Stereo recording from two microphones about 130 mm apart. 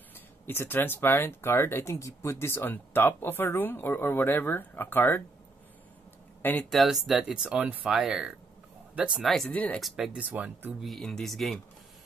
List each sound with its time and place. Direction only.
0.5 s speech: 15° left (ahead or behind)
6.7 s speech: centre (ahead or behind)
10.9 s speech: 5° left (ahead or behind)